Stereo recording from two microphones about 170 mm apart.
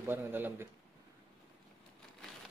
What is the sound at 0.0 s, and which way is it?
Speech, 10° right (ahead or behind).